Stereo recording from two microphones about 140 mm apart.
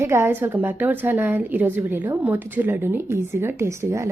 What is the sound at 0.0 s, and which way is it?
A woman's voice, 20° right (ahead or behind).